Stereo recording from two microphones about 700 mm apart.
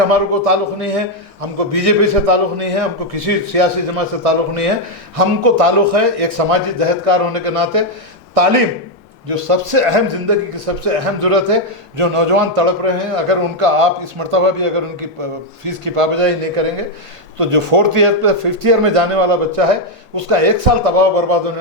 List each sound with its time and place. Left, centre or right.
0.1 s a man's voice: right